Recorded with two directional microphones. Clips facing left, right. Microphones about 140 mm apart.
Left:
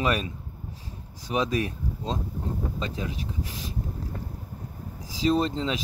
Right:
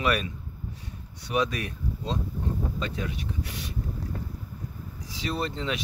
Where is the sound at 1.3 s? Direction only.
30° left (ahead or behind).